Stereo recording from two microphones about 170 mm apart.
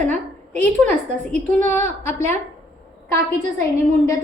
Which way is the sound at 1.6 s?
10° left (ahead or behind).